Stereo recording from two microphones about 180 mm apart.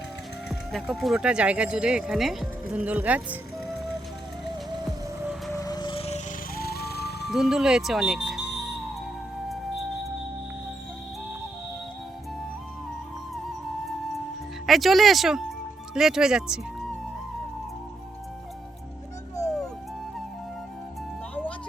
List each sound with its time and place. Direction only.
0.7 s speech: centre (ahead or behind)
5.5 s music: 20° left (ahead or behind)
6.6 s music: 60° left (ahead or behind)
7.3 s speech: 5° right (ahead or behind)
14.7 s speech: centre (ahead or behind)